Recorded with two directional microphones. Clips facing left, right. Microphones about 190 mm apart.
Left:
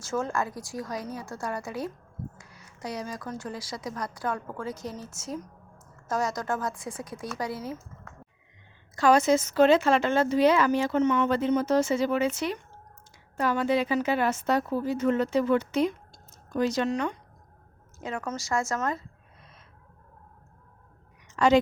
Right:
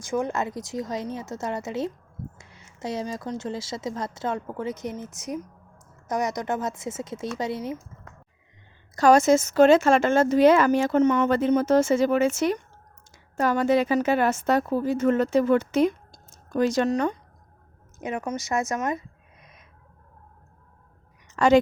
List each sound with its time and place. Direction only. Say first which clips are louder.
0.0 s speech: right 3 dB; 15° right (ahead or behind)
9.0 s speech: right 4 dB; 45° right (ahead or behind)
18.0 s speech: right 4 dB; 20° right (ahead or behind)
21.3 s a woman's voice: right 3 dB; 45° right (ahead or behind)